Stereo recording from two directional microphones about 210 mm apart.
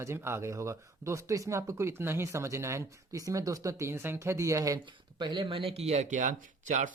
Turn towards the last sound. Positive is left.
turn(degrees=-35)  # may be behind; listen again after turning